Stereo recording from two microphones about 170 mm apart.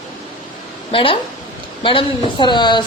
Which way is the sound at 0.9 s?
30° left (ahead or behind).